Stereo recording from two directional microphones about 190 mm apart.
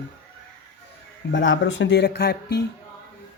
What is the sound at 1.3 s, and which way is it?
Speech, 80° left.